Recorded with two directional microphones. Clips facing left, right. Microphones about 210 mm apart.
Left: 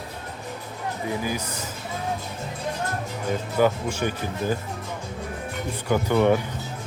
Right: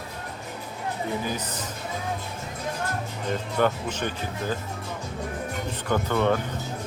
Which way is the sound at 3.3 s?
5° left (ahead or behind).